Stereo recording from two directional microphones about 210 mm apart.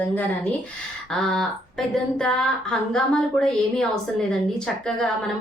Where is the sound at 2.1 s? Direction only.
5° left (ahead or behind).